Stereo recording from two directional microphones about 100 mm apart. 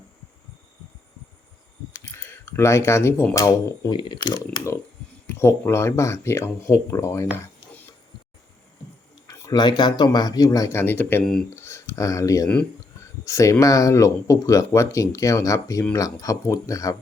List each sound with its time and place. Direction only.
1.9 s camera: 30° left (ahead or behind)
3.3 s speech: 35° left (ahead or behind)
3.9 s speech: 50° left (ahead or behind)
5.2 s speech: 25° left (ahead or behind)
7.3 s a sound: 15° left (ahead or behind)
9.5 s speech: 45° left (ahead or behind); by 11.2 s 20° left (ahead or behind)
11.2 s speech: 5° left (ahead or behind)
11.5 s speech: 25° left (ahead or behind)